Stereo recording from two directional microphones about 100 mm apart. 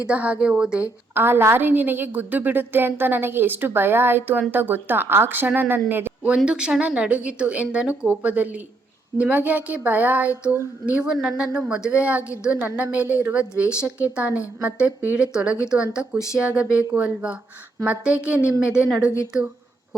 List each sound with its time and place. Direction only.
0.1 s speech: 10° right (ahead or behind)
1.1 s a woman's voice: 20° right (ahead or behind)